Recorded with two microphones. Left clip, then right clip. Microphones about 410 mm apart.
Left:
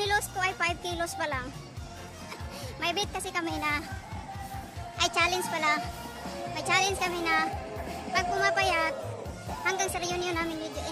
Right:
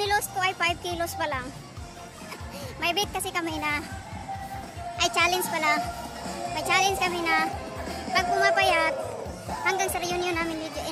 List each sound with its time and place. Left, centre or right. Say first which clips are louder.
0.0 s music: right 3 dB; left
2.8 s speech: right 4 dB; left
4.9 s speech: right 3 dB; left
7.8 s music: right 3 dB; centre
8.1 s speech: right 4 dB; left